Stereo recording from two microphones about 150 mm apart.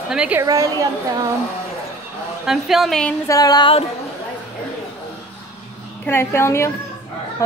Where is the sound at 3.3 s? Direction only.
25° left (ahead or behind).